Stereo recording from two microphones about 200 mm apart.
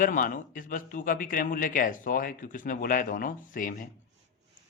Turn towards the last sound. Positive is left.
turn(degrees=40)  # may be behind; listen again after turning